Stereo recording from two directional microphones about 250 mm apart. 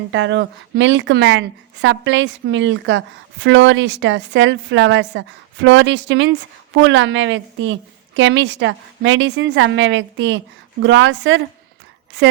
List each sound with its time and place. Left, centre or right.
0.1 s a woman's voice: right